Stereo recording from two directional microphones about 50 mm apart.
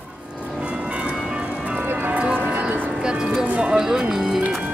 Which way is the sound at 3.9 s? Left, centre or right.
Centre.